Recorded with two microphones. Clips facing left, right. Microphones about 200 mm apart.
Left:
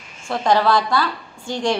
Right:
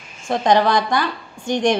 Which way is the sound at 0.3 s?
20° right (ahead or behind).